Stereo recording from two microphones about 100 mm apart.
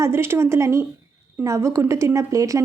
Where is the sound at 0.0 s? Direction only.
25° right (ahead or behind).